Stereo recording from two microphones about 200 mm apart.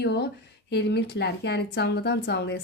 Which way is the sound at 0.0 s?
55° left (ahead or behind).